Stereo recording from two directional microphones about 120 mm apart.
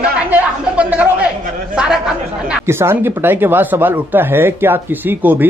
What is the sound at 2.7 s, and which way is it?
Speech, 20° right (ahead or behind).